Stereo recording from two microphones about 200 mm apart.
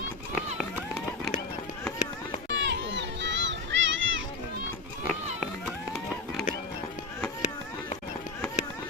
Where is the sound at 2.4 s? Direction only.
60° right (ahead or behind).